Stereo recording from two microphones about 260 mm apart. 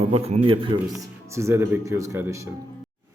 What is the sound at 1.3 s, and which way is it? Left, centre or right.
Speech, centre.